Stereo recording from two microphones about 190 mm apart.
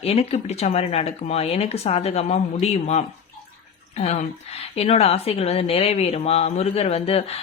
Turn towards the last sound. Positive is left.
turn(degrees=30)  # may be behind; listen again after turning